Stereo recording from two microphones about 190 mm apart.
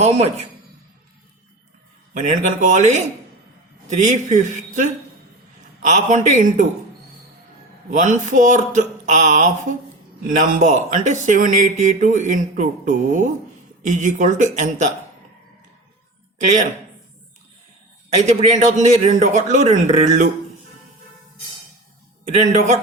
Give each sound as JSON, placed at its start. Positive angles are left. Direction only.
{"t": 0.0, "sound": "speech", "side_deg": -35}
{"t": 2.1, "sound": "speech", "side_deg": -40}
{"t": 7.9, "sound": "speech", "side_deg": -40}
{"t": 18.2, "sound": "speech", "side_deg": -35}
{"t": 22.4, "sound": "speech", "side_deg": -40}